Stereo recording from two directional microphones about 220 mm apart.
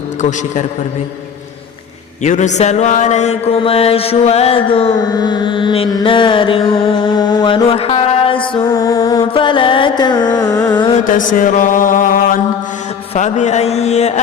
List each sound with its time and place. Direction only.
0.2 s music: 35° left (ahead or behind)
2.2 s mantra: 35° left (ahead or behind)
11.0 s music: 40° left (ahead or behind)